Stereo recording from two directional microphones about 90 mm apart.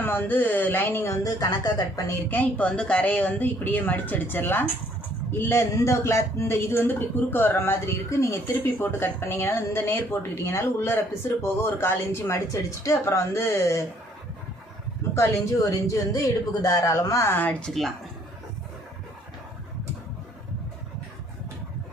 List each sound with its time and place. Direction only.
0.0 s a man's voice: 20° left (ahead or behind)
1.0 s speech: 40° left (ahead or behind)
2.3 s a man's voice: 15° left (ahead or behind); by 13.8 s 35° left (ahead or behind)
15.1 s speech: 35° left (ahead or behind)
17.3 s speech: 15° left (ahead or behind)
17.7 s speech: centre (ahead or behind)